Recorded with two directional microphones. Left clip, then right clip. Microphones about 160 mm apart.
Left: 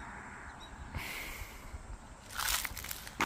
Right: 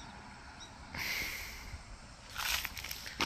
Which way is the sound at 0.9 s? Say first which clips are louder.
Right 5 dB; 5° left (ahead or behind).